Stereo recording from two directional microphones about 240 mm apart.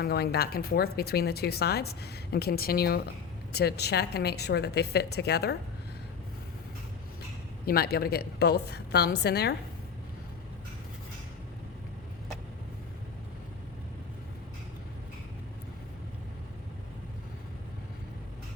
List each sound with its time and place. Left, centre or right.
0.0 s a woman's voice: left
7.6 s speech: left